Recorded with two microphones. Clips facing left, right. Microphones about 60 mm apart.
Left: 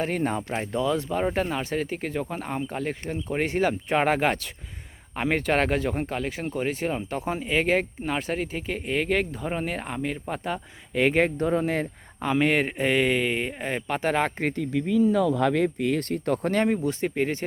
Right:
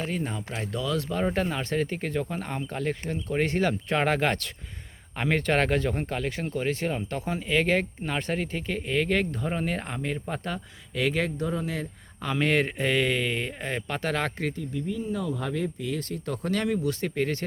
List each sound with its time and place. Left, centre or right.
0.0 s speech: left
0.7 s speech: left; by 10.6 s centre
10.9 s speech: left
12.2 s speech: centre
14.5 s speech: left; by 17.4 s centre